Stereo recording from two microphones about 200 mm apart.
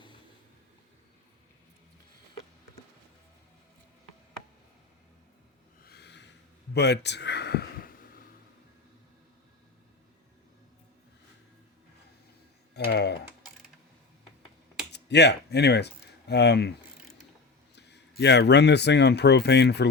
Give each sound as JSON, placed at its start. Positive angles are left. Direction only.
{"t": 5.8, "sound": "a sound", "side_deg": 55}
{"t": 12.9, "sound": "typing", "side_deg": 55}
{"t": 14.9, "sound": "speech", "side_deg": 60}
{"t": 17.7, "sound": "speech", "side_deg": 60}